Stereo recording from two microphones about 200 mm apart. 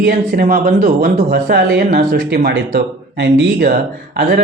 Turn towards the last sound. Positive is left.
turn(degrees=-50)  # may be behind; listen again after turning